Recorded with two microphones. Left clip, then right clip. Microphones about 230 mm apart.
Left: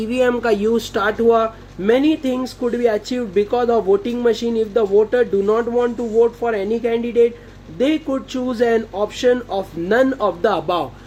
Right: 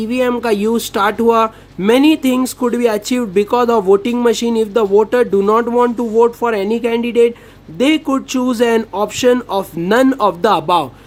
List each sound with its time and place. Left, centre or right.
0.0 s speech: right